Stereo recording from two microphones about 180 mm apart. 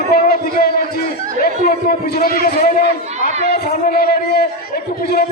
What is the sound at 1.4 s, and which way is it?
A man's voice, 55° left (ahead or behind).